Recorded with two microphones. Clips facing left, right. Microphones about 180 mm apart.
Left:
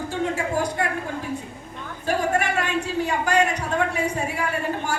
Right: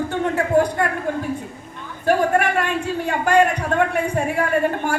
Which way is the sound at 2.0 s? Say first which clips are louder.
Right 5 dB; 55° right (ahead or behind).